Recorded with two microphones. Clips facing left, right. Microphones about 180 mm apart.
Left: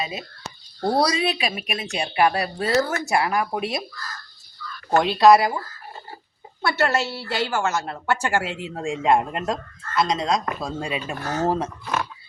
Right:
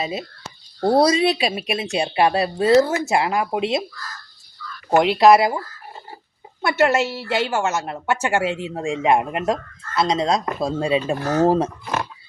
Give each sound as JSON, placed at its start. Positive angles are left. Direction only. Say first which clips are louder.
{"t": 0.0, "sound": "a woman's voice", "louder": "right 4 dB", "side_deg": -30}
{"t": 4.9, "sound": "a woman's voice", "louder": "right 2 dB", "side_deg": -20}
{"t": 6.6, "sound": "a woman's voice", "louder": "right 4 dB", "side_deg": -20}